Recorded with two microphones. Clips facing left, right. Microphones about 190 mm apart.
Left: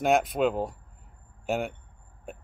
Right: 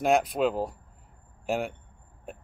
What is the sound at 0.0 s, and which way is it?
Speech, centre (ahead or behind).